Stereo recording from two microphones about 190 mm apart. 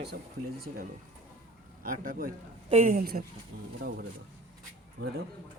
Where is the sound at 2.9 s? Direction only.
50° right (ahead or behind).